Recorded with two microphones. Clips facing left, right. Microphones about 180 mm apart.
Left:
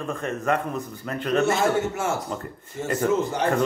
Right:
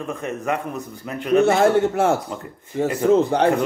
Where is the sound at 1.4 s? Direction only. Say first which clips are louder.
Right 6 dB; 60° right (ahead or behind).